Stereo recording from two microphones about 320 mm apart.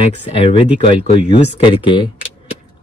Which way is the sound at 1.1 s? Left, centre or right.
Centre.